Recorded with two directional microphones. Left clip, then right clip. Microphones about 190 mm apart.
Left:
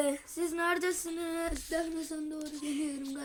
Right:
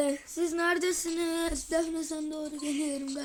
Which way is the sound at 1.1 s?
40° right (ahead or behind).